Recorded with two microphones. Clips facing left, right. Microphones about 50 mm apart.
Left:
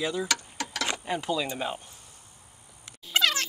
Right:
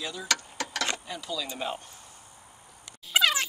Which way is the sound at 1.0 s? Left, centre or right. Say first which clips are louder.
Left 6 dB; left.